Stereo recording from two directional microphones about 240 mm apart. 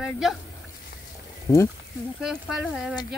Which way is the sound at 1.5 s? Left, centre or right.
Centre.